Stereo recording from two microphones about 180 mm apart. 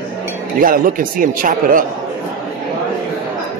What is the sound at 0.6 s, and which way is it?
A man's voice, 50° right (ahead or behind).